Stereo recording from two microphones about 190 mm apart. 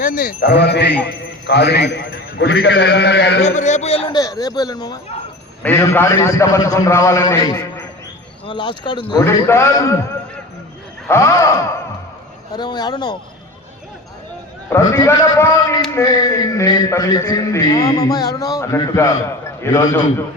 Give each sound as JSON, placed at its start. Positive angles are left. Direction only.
{"t": 0.0, "sound": "a man's voice", "side_deg": 45}
{"t": 3.4, "sound": "a man's voice", "side_deg": 40}
{"t": 9.2, "sound": "a man's voice", "side_deg": 15}
{"t": 11.1, "sound": "a man's voice", "side_deg": 15}
{"t": 14.7, "sound": "a man's voice", "side_deg": 15}